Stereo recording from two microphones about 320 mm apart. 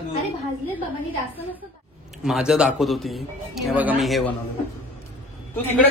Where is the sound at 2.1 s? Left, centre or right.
Centre.